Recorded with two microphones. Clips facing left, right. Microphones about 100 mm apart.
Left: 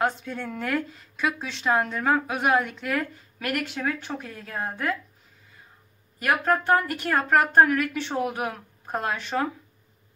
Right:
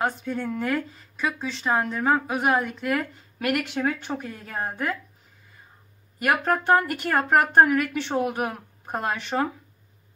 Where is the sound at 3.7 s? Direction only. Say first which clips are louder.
Right 3 dB; 25° right (ahead or behind).